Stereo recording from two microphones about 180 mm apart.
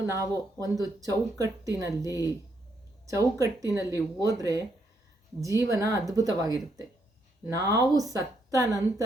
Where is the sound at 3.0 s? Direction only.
15° right (ahead or behind).